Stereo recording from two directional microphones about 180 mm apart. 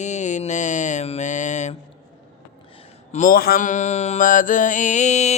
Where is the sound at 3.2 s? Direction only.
50° left (ahead or behind).